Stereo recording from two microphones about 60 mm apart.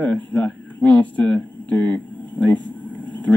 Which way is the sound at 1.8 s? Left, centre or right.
Left.